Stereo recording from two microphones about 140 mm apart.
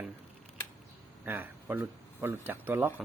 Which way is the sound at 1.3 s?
15° right (ahead or behind).